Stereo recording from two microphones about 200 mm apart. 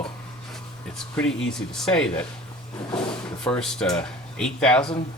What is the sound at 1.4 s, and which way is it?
Speech, 5° left (ahead or behind).